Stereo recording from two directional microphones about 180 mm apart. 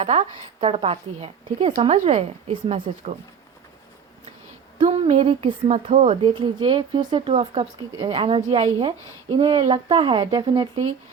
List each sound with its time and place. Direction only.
0.0 s a woman's voice: 35° right (ahead or behind)
4.8 s a woman's voice: 35° right (ahead or behind)